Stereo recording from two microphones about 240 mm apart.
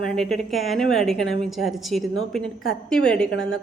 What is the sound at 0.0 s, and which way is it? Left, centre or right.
A woman's voice, centre.